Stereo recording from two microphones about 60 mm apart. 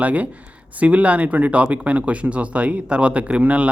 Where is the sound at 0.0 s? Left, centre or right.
Right.